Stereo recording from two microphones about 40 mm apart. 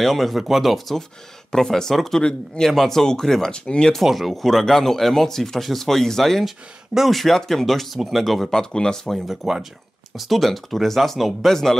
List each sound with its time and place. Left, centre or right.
0.0 s speech: centre
1.5 s speech: centre
2.2 s a man's voice: left
2.7 s speech: centre
3.5 s a man's voice: left
4.0 s speech: centre
6.4 s speech: centre
8.5 s speech: centre
9.1 s speech: centre